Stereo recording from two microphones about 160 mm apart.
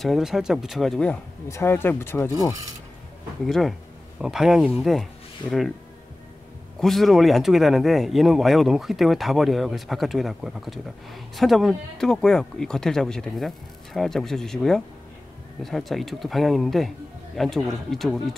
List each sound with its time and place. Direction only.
0.0 s speech: centre (ahead or behind)
1.5 s speech: 15° left (ahead or behind)
3.4 s speech: centre (ahead or behind)
6.8 s speech: centre (ahead or behind)